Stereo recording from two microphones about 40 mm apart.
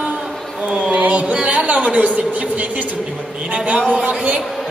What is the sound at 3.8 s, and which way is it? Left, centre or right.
Speech, right.